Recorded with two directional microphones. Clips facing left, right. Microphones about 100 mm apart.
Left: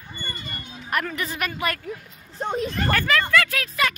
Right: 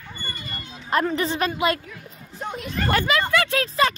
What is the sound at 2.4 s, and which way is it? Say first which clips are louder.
Speech: left 6 dB; 30° left (ahead or behind).